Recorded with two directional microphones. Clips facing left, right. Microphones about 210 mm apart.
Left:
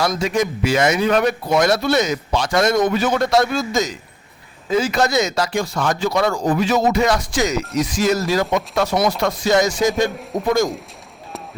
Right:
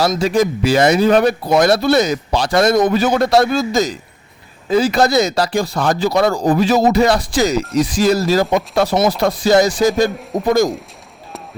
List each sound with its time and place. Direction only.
0.0 s speech: 30° right (ahead or behind)